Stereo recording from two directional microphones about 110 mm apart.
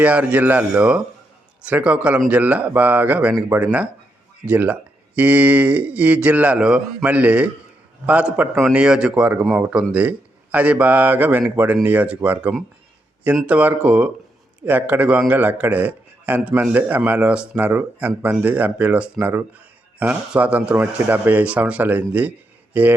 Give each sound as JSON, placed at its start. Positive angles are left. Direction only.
{"t": 0.0, "sound": "speech", "side_deg": -15}